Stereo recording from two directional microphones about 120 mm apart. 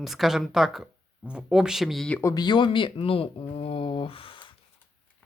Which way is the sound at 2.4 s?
40° left (ahead or behind).